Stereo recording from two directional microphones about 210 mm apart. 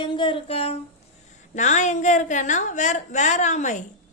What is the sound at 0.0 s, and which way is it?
A woman's voice, 20° left (ahead or behind).